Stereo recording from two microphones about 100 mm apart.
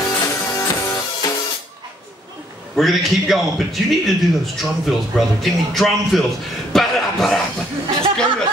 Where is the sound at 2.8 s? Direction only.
Centre (ahead or behind).